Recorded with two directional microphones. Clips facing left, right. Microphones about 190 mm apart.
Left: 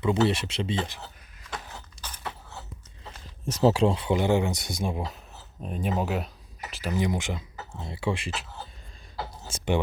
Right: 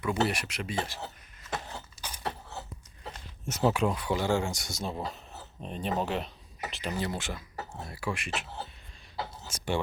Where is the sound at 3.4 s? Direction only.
30° left (ahead or behind).